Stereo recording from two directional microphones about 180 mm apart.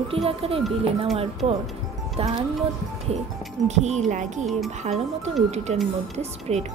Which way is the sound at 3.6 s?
40° right (ahead or behind).